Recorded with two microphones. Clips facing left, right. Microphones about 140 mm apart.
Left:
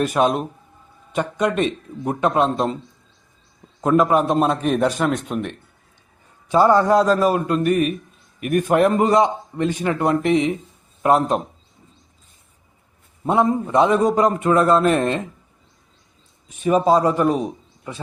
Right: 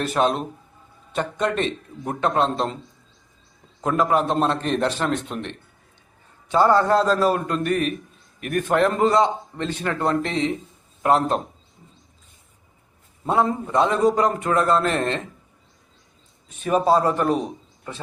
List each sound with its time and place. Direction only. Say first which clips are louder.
0.0 s a man's voice: left 3 dB; 10° left (ahead or behind)
3.8 s a man's voice: left 4 dB; 20° left (ahead or behind)
13.2 s a man's voice: left 3 dB; 20° left (ahead or behind)
16.6 s a man's voice: left 3 dB; centre (ahead or behind)